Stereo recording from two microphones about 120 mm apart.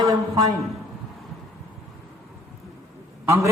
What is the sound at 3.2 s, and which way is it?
Speech, 20° right (ahead or behind).